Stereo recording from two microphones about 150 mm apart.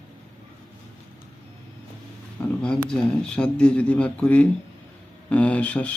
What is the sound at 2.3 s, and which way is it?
Speech, 5° left (ahead or behind).